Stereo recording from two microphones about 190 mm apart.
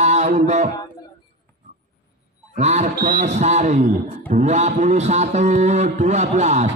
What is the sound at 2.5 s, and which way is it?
A man's voice, 35° right (ahead or behind).